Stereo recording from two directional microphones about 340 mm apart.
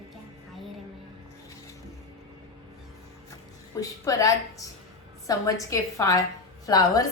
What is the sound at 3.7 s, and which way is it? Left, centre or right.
A woman's voice, centre.